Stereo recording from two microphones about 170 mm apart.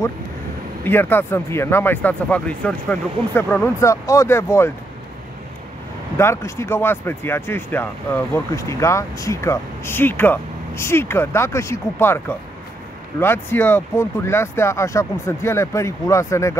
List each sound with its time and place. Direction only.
0.8 s speech: 10° left (ahead or behind)
6.1 s speech: 15° left (ahead or behind)